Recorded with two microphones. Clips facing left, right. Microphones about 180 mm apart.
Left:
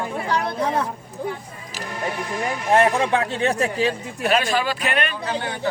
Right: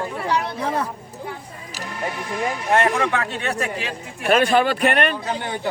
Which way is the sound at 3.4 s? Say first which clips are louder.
Left 4 dB; 35° left (ahead or behind).